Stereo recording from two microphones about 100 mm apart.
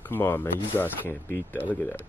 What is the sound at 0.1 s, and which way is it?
Speech, 25° left (ahead or behind).